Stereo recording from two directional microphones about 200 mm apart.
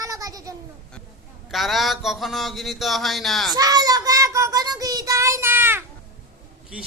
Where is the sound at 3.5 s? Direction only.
20° right (ahead or behind).